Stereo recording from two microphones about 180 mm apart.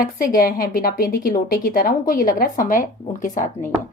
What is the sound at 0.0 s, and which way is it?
Speech, 50° left (ahead or behind).